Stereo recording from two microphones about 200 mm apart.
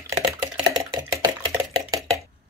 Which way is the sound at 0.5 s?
20° right (ahead or behind).